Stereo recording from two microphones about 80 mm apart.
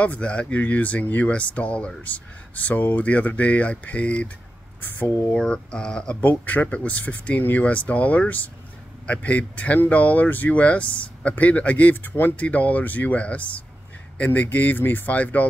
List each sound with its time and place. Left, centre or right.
0.0 s speech: centre